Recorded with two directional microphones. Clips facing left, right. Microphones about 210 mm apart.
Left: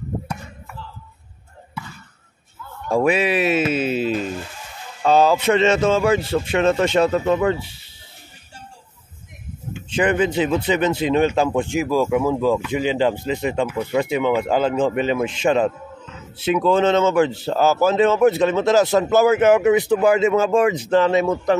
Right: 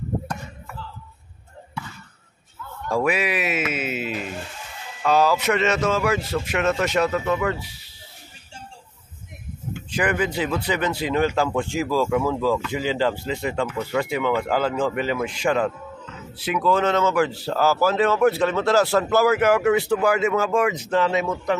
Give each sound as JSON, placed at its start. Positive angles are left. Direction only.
{"t": 2.9, "sound": "speech", "side_deg": 25}
{"t": 9.8, "sound": "speech", "side_deg": 25}